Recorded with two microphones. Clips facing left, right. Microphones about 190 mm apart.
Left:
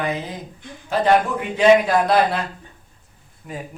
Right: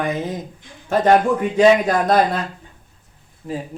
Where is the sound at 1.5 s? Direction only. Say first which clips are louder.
Left 1 dB; 45° right (ahead or behind).